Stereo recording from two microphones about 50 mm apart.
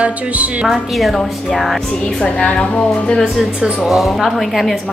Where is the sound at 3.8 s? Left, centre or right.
Centre.